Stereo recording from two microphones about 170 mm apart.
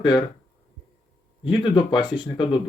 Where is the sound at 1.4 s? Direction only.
25° left (ahead or behind).